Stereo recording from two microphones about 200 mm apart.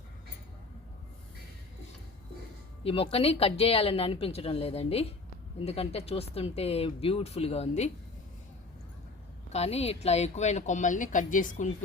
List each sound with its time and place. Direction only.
2.8 s a woman's voice: 30° left (ahead or behind)
9.5 s speech: 30° left (ahead or behind)